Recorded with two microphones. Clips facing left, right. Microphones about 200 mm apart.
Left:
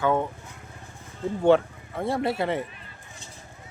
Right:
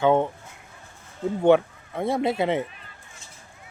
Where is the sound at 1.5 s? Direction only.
15° right (ahead or behind).